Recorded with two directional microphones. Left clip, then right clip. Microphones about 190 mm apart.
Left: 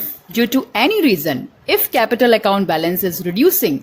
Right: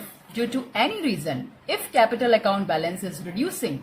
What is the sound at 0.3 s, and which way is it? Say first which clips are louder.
A woman's voice: left 8 dB; 45° left (ahead or behind).